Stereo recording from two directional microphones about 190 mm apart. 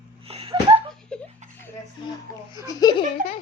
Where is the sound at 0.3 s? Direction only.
30° right (ahead or behind).